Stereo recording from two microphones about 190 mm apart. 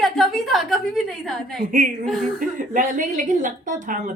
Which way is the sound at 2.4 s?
45° right (ahead or behind).